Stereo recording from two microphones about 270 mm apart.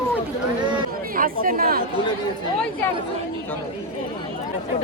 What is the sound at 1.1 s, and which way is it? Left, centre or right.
Speech, right.